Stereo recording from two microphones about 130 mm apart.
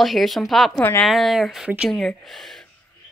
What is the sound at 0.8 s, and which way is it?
Speech, 15° left (ahead or behind).